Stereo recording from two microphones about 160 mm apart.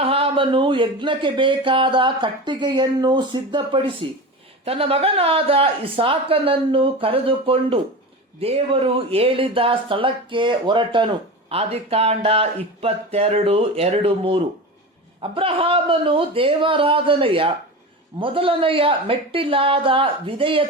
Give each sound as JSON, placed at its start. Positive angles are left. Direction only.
{"t": 0.0, "sound": "speech", "side_deg": -35}